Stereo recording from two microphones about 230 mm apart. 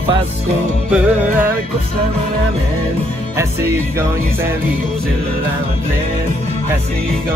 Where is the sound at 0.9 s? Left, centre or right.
Centre.